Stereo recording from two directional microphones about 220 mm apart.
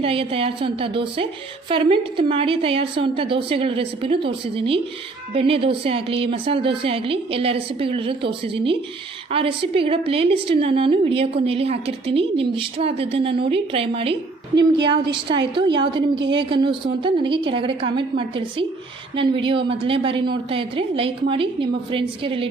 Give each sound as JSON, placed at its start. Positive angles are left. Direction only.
{"t": 0.0, "sound": "a woman's voice", "side_deg": -25}